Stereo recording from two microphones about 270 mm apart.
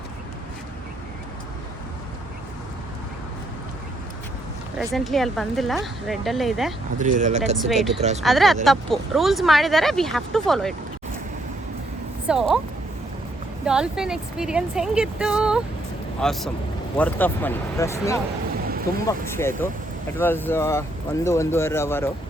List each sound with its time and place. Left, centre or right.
4.8 s speech: centre
7.0 s speech: right
7.7 s speech: centre
12.3 s speech: centre
13.7 s speech: centre
18.6 s a sound: right
19.3 s speech: centre